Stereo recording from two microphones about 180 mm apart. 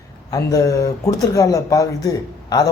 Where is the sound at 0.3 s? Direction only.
20° left (ahead or behind).